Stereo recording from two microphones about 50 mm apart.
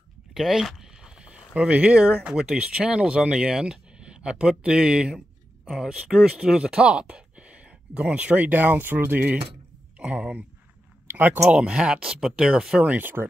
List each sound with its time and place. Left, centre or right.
0.3 s speech: centre; by 8.4 s right
8.4 s speech: right
9.9 s speech: right
11.1 s speech: right
11.4 s speech: centre
12.8 s speech: right